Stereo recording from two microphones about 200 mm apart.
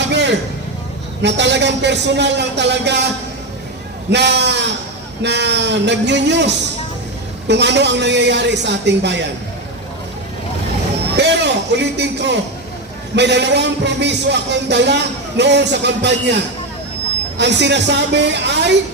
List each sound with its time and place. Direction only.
0.0 s a sound: 60° right (ahead or behind)
1.2 s speech: 60° right (ahead or behind)
4.1 s speech: 60° right (ahead or behind)
11.2 s speech: 60° right (ahead or behind)